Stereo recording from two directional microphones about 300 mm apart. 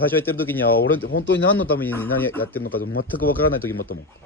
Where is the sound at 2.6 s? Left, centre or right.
Left.